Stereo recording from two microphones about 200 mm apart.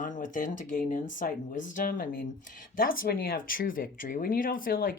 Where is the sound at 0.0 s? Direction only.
40° left (ahead or behind).